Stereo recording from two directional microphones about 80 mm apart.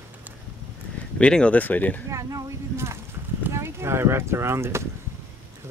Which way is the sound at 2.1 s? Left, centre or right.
Right.